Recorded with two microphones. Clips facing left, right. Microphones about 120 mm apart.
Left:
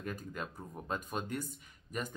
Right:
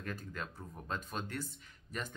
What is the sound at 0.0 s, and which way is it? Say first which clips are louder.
Speech: left 2 dB; 10° left (ahead or behind).